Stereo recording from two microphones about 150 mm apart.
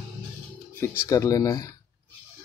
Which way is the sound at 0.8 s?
15° left (ahead or behind).